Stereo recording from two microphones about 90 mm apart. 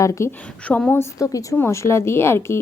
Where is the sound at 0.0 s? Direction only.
35° left (ahead or behind).